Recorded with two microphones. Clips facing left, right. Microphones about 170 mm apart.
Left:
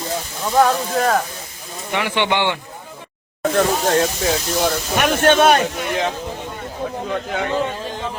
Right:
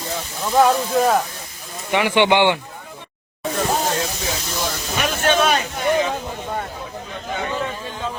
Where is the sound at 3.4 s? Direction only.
70° left (ahead or behind).